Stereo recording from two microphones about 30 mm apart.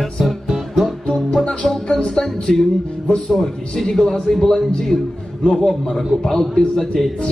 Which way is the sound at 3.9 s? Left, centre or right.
Centre.